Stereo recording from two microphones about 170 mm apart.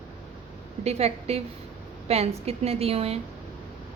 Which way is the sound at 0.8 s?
40° right (ahead or behind).